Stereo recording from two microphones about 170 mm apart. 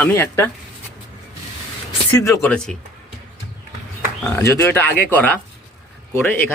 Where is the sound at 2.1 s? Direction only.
20° left (ahead or behind).